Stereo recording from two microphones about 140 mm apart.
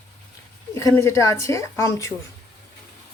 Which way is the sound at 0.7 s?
20° left (ahead or behind).